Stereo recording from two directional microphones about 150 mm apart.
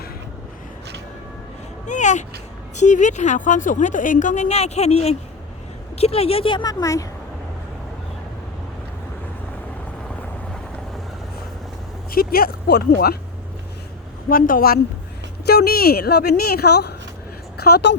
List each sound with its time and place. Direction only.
1.9 s a sound: 55° left (ahead or behind)
2.7 s a woman's voice: 55° left (ahead or behind); by 7.1 s 20° left (ahead or behind)
12.1 s speech: 80° left
14.3 s a woman's voice: 70° left (ahead or behind)
15.4 s a woman's voice: 90° left